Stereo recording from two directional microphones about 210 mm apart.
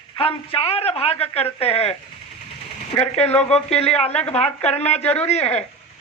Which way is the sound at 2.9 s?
30° left (ahead or behind).